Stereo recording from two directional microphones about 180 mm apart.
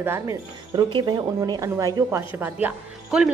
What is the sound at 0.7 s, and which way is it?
A woman's voice, 25° right (ahead or behind).